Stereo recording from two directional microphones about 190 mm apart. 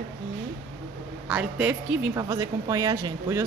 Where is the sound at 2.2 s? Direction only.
20° right (ahead or behind).